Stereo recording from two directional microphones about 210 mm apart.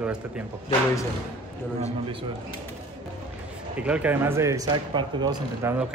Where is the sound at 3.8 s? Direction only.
5° right (ahead or behind).